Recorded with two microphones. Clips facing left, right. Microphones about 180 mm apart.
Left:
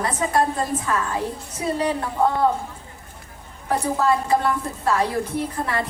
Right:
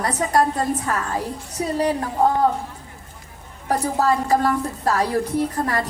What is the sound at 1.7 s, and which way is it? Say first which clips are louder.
Speech: right 3 dB; 40° right (ahead or behind).